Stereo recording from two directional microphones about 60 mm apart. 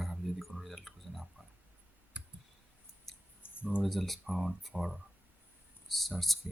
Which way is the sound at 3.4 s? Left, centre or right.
Left.